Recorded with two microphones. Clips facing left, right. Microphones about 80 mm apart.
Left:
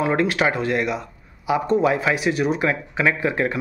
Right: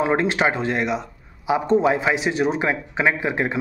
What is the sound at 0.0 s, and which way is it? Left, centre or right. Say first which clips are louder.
Speech: even; right.